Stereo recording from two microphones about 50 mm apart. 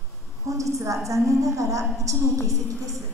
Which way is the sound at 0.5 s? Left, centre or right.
Right.